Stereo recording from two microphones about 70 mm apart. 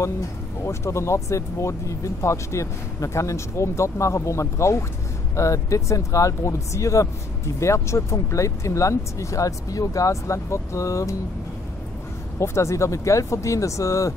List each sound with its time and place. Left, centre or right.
0.7 s speech: left
12.4 s speech: left